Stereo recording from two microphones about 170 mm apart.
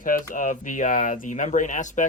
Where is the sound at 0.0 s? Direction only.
50° left (ahead or behind).